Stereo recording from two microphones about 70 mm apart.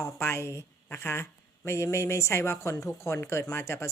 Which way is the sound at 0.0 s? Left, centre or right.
Left.